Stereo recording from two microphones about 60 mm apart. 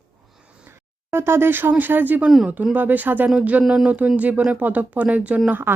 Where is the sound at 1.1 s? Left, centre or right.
Right.